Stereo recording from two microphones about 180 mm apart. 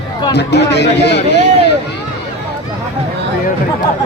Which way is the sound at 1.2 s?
70° left (ahead or behind).